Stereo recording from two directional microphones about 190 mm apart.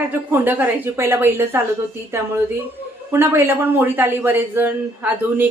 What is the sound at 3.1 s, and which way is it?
Speech, 15° right (ahead or behind).